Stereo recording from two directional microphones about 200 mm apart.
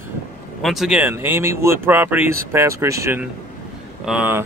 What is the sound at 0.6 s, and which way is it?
Speech, centre (ahead or behind).